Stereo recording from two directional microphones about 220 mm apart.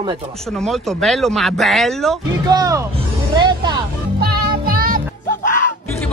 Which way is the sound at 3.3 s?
20° right (ahead or behind).